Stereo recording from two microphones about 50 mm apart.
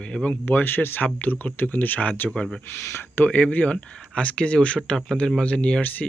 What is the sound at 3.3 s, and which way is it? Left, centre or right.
Speech, left.